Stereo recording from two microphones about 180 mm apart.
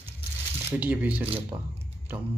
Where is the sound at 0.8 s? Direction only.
10° right (ahead or behind).